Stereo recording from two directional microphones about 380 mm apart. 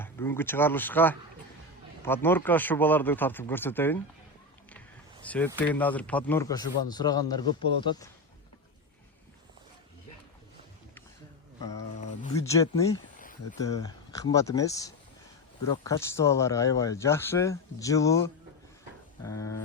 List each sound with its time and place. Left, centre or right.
0.0 s speech: centre
5.2 s speech: centre
12.3 s speech: centre
13.1 s a sound: left
13.6 s speech: centre
19.2 s speech: centre